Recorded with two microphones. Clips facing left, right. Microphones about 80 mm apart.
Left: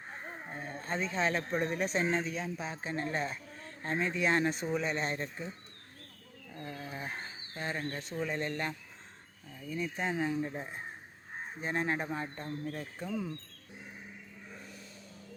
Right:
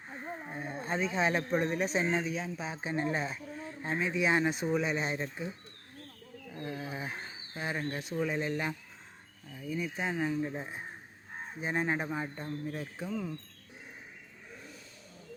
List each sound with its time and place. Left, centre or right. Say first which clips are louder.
0.4 s speech: right 2 dB; centre
2.7 s speech: right 4 dB; centre
6.5 s speech: right 3 dB; centre